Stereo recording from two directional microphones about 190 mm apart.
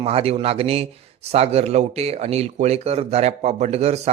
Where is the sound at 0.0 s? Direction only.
30° right (ahead or behind).